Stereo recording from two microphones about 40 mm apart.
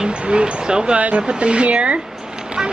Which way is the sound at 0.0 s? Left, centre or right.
Right.